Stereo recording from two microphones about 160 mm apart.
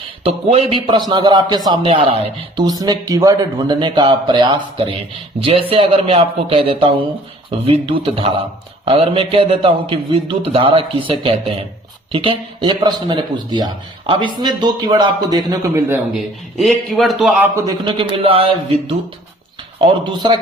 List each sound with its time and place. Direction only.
0.3 s a man's voice: 40° right (ahead or behind)
16.1 s a man's voice: centre (ahead or behind)
17.5 s a man's voice: 25° right (ahead or behind)